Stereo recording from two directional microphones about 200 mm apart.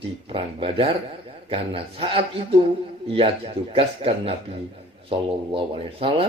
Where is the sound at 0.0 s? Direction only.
25° right (ahead or behind).